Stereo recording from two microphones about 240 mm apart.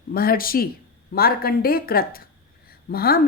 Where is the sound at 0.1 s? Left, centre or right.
Left.